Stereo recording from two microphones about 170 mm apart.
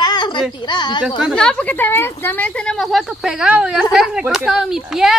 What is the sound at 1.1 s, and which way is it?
Speech, centre (ahead or behind).